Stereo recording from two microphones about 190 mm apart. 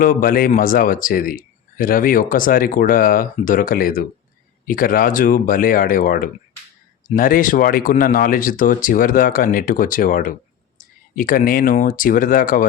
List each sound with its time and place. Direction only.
0.0 s speech: 45° left (ahead or behind)